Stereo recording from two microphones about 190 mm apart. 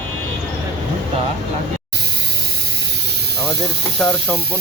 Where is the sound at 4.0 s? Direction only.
10° left (ahead or behind).